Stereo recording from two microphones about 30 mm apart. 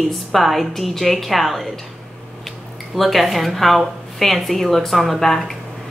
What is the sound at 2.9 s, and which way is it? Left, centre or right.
A woman's voice, centre.